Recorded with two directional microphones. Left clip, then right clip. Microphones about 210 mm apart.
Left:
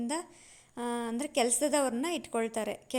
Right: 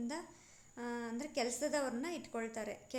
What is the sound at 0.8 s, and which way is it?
A woman's voice, 35° left (ahead or behind).